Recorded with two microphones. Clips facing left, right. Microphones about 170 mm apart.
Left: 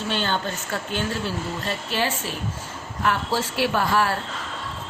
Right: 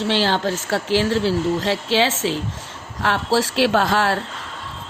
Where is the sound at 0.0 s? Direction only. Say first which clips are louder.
Right 6 dB; 85° right.